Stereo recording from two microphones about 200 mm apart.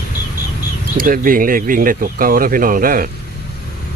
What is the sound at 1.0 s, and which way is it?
Speech, 45° right (ahead or behind).